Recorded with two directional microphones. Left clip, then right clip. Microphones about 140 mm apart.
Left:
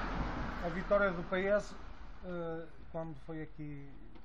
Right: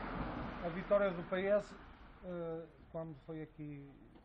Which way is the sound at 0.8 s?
5° right (ahead or behind).